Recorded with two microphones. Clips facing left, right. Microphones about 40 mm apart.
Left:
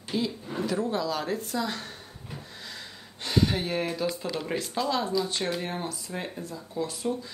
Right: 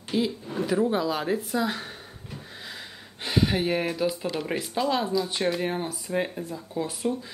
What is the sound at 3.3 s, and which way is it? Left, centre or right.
Speech, centre.